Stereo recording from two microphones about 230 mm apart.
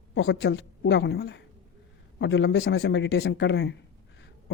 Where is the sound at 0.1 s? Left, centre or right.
Left.